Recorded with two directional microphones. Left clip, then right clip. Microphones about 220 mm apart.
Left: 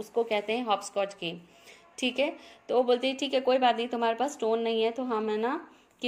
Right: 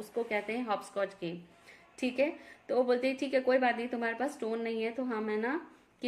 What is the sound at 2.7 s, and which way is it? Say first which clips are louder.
Speech: left 4 dB; 15° left (ahead or behind).